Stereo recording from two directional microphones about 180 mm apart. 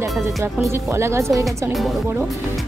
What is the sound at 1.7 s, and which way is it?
Speech, centre (ahead or behind).